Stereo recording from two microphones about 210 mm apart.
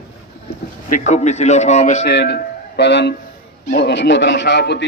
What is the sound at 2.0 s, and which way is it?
A man's voice, 55° left (ahead or behind).